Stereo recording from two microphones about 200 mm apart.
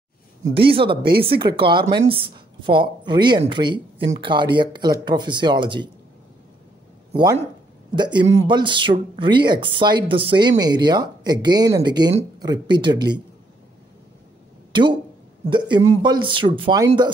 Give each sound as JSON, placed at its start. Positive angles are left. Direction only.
{"t": 0.6, "sound": "speech", "side_deg": -25}
{"t": 7.2, "sound": "speech", "side_deg": -20}
{"t": 14.7, "sound": "speech", "side_deg": -25}